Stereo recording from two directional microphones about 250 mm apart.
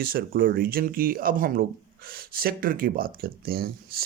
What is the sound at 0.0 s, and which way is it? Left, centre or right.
Speech, right.